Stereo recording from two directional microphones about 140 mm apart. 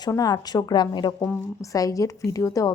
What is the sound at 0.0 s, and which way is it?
A woman's voice, 30° left (ahead or behind).